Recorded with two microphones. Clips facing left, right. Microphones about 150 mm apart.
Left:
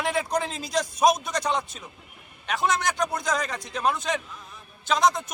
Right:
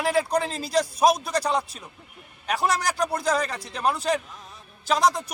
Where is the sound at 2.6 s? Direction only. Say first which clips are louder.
Even; 35° right (ahead or behind).